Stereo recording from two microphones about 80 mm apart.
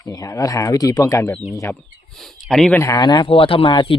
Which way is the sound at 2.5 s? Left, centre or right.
Centre.